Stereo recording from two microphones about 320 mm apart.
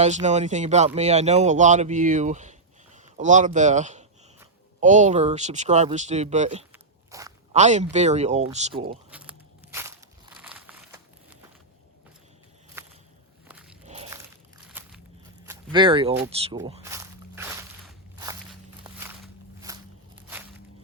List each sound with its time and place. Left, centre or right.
0.0 s speech: right
7.1 s zipper: centre
7.5 s speech: right
9.0 s biting: centre
9.7 s a sound: centre
12.8 s walk: centre
13.8 s biting: centre
14.7 s walk: centre
15.7 s walk: centre